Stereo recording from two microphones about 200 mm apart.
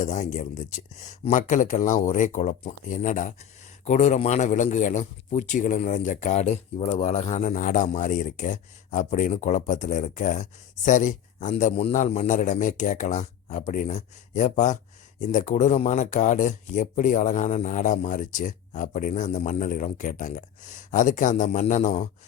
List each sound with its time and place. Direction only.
0.0 s speech: 35° left (ahead or behind)